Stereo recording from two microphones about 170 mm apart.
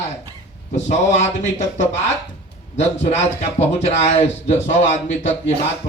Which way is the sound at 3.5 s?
40° left (ahead or behind).